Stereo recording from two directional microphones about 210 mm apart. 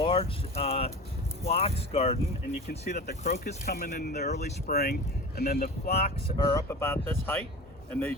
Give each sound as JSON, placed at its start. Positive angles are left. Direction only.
{"t": 0.0, "sound": "speech", "side_deg": 25}
{"t": 2.9, "sound": "speech", "side_deg": 40}
{"t": 4.3, "sound": "speech", "side_deg": 35}
{"t": 4.7, "sound": "speech", "side_deg": 45}
{"t": 5.9, "sound": "speech", "side_deg": 30}
{"t": 6.3, "sound": "speech", "side_deg": 15}